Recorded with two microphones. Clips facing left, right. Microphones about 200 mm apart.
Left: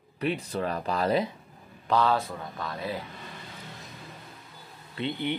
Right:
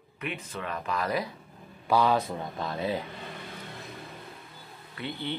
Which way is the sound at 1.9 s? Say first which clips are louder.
Right 1 dB; 15° right (ahead or behind).